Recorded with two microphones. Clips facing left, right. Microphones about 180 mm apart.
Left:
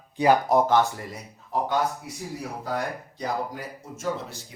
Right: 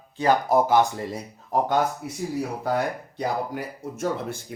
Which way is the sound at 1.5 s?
45° right (ahead or behind).